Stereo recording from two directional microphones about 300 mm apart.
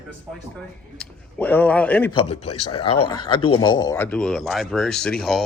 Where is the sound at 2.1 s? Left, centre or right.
Centre.